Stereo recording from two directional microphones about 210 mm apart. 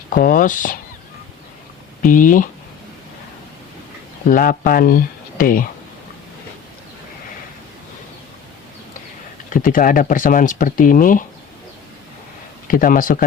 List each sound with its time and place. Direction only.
0.1 s speech: 40° left (ahead or behind)
2.0 s speech: 40° left (ahead or behind)
4.3 s speech: 40° left (ahead or behind)
9.5 s speech: 40° left (ahead or behind)
12.6 s speech: 40° left (ahead or behind)